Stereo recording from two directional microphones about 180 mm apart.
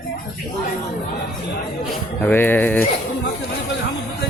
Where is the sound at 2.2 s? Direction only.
10° left (ahead or behind).